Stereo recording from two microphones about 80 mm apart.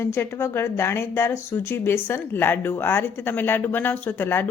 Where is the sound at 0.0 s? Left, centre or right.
Left.